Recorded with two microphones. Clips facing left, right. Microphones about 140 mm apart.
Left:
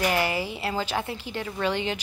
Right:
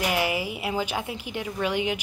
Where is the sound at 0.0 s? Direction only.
10° right (ahead or behind).